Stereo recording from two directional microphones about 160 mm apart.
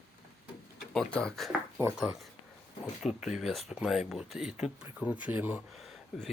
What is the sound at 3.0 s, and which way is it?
Speech, 5° right (ahead or behind).